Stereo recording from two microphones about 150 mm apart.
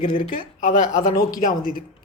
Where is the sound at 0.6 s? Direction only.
55° left (ahead or behind).